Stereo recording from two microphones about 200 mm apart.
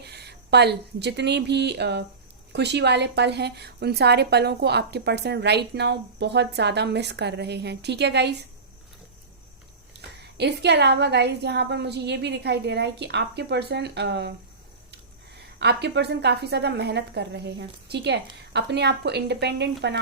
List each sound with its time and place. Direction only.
0.0 s a woman's voice: 55° right (ahead or behind)
10.3 s a woman's voice: 55° right (ahead or behind)
15.4 s a woman's voice: 55° right (ahead or behind)